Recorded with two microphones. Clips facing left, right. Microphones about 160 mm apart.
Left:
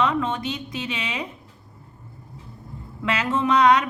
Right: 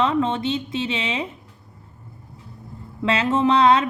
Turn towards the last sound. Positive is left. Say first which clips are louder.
# right 2 dB
turn(degrees=-25)  # may be behind; listen again after turning